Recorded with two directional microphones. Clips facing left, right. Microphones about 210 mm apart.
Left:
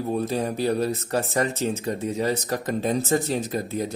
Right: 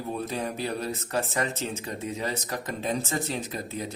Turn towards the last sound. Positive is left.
turn(degrees=40)  # may be behind; listen again after turning